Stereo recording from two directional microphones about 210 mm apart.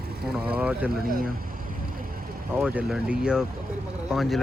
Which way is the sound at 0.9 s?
45° right (ahead or behind).